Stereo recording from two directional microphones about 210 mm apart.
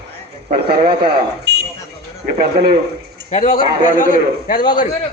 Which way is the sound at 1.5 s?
50° right (ahead or behind).